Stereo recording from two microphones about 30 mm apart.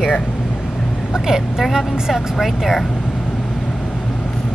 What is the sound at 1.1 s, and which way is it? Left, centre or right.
Speech, centre.